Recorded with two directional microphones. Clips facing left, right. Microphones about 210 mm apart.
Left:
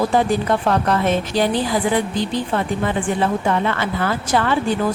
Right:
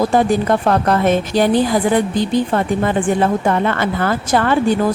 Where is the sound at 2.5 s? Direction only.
50° right (ahead or behind).